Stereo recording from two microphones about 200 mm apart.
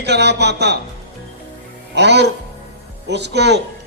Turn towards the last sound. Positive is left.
turn(degrees=-60)  # may be behind; listen again after turning